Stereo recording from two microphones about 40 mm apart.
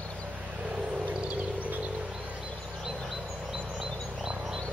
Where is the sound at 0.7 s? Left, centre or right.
Right.